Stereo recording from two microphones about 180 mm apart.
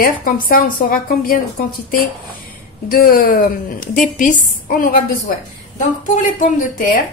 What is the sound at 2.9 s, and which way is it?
A woman's voice, 55° left (ahead or behind).